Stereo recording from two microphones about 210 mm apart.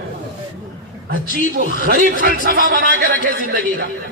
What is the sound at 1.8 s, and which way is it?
A man's voice, 40° right (ahead or behind).